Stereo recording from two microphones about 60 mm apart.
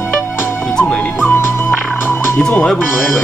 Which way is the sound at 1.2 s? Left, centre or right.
Left.